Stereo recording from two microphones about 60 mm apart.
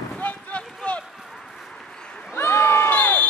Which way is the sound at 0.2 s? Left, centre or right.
Left.